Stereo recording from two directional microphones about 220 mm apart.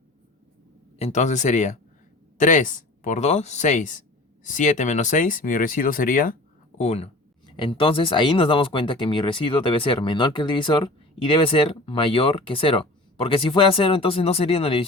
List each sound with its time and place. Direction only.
0.9 s speech: 30° left (ahead or behind)